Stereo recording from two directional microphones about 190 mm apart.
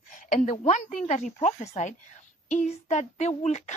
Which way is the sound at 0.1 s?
45° left (ahead or behind).